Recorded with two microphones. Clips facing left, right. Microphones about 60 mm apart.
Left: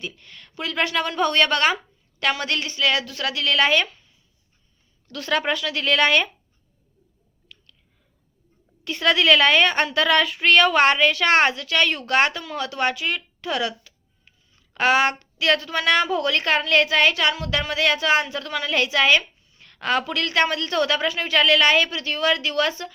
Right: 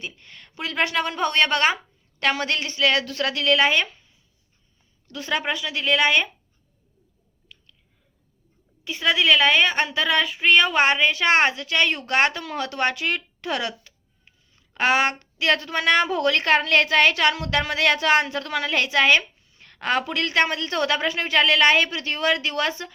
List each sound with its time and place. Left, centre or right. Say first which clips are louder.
0.0 s a woman's voice: left 2 dB; right
5.1 s speech: left 2 dB; centre
8.8 s a woman's voice: left 2 dB; centre; by 22.9 s right